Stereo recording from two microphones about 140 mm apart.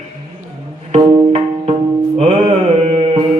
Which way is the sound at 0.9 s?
50° right (ahead or behind).